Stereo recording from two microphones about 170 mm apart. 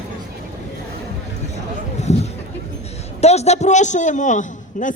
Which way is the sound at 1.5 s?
40° left (ahead or behind).